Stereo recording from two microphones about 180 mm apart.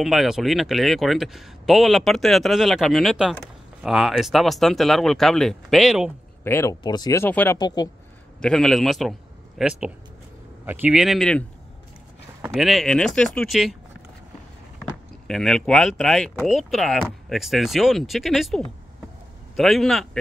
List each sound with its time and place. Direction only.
0.0 s speech: centre (ahead or behind)
6.4 s speech: 15° left (ahead or behind)
7.5 s speech: 20° left (ahead or behind)
8.4 s speech: 5° left (ahead or behind)
12.5 s speech: centre (ahead or behind)
14.8 s speech: centre (ahead or behind)